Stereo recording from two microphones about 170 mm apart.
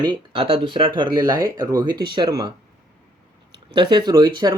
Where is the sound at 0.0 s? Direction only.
30° right (ahead or behind).